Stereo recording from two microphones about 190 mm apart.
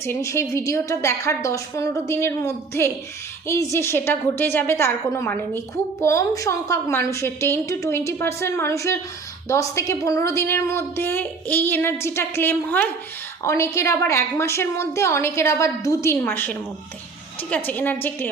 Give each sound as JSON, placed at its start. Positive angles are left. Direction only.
{"t": 0.0, "sound": "a woman's voice", "side_deg": 15}